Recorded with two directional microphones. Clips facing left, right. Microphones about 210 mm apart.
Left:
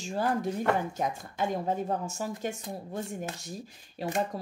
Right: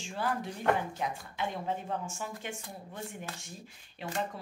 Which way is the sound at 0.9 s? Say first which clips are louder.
Left 4 dB; 45° left (ahead or behind).